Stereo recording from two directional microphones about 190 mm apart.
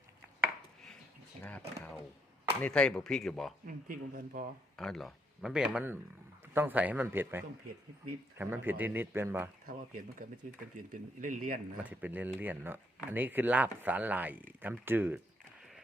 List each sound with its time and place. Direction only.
1.5 s speech: 5° left (ahead or behind)
3.7 s speech: 45° right (ahead or behind)
4.8 s speech: centre (ahead or behind)
9.6 s speech: 45° right (ahead or behind)
11.8 s speech: 10° right (ahead or behind)